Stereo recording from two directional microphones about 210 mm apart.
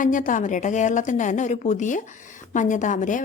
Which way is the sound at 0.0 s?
40° left (ahead or behind).